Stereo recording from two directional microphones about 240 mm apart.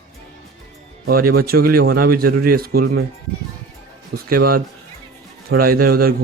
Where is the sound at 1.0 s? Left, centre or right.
Right.